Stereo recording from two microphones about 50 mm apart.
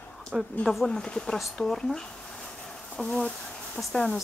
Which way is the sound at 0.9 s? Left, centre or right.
Centre.